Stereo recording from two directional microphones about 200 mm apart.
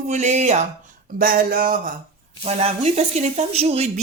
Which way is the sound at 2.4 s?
30° right (ahead or behind).